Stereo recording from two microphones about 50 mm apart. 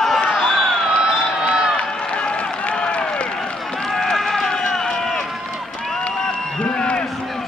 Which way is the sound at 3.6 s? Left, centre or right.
Centre.